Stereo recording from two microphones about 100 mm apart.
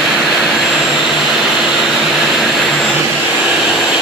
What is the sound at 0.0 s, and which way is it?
Vacuum cleaner, 5° right (ahead or behind).